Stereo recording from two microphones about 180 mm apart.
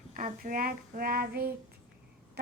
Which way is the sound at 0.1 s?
50° right (ahead or behind).